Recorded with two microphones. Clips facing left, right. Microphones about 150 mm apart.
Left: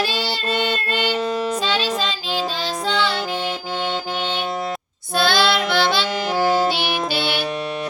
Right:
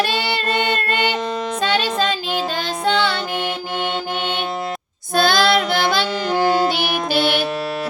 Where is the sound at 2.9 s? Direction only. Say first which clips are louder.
Right 4 dB; 60° right (ahead or behind).